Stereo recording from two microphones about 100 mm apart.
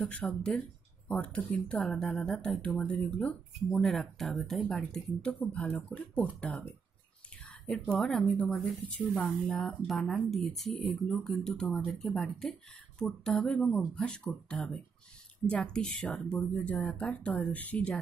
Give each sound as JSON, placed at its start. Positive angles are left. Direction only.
{"t": 0.0, "sound": "a woman's voice", "side_deg": 10}